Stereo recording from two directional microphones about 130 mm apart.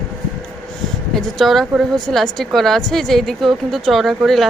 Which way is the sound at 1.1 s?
Centre (ahead or behind).